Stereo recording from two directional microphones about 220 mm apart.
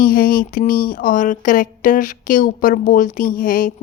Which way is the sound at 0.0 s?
40° left (ahead or behind).